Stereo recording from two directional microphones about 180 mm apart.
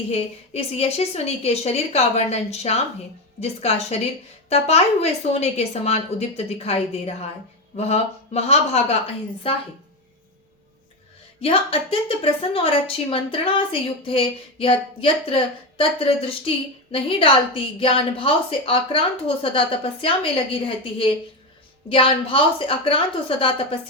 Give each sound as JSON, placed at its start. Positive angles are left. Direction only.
{"t": 0.1, "sound": "a woman's voice", "side_deg": 35}
{"t": 11.3, "sound": "a woman's voice", "side_deg": 30}